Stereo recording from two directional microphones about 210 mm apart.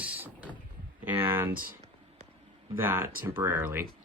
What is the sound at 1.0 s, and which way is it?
Speech, 10° right (ahead or behind).